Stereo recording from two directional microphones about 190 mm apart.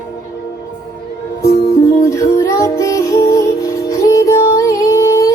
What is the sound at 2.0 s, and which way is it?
Music, 15° left (ahead or behind).